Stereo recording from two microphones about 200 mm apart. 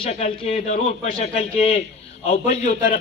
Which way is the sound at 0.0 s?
30° left (ahead or behind).